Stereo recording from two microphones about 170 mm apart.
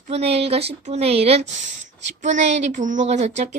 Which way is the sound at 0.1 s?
35° right (ahead or behind).